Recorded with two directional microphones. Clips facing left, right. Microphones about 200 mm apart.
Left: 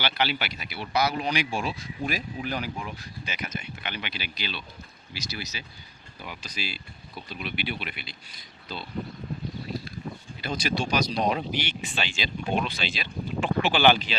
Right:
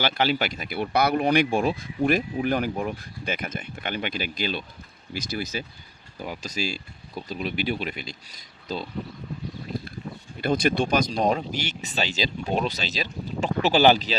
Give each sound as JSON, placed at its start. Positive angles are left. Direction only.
{"t": 0.0, "sound": "speech", "side_deg": -45}
{"t": 10.4, "sound": "speech", "side_deg": -55}